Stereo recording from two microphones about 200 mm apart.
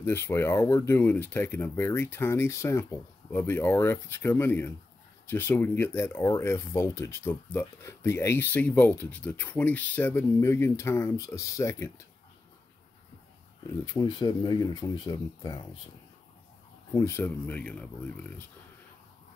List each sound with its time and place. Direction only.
0.0 s speech: 10° left (ahead or behind)
13.9 s speech: 20° left (ahead or behind)
16.9 s speech: 15° left (ahead or behind)